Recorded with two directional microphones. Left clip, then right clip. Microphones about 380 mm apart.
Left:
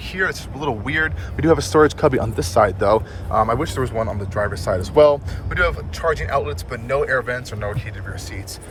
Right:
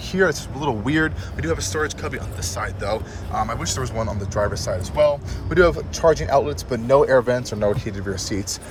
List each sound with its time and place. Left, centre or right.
0.1 s speech: centre
5.5 s speech: centre